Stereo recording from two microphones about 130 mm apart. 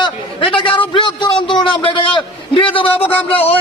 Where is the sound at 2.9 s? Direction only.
15° left (ahead or behind).